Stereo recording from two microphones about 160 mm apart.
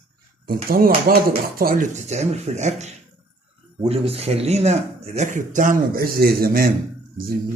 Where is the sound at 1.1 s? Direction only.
65° right (ahead or behind).